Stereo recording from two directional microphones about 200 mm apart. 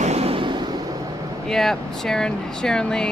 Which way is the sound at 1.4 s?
Centre (ahead or behind).